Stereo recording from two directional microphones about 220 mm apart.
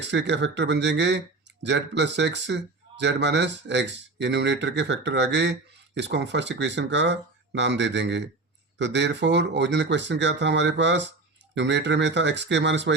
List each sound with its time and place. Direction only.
0.0 s speech: 50° right (ahead or behind)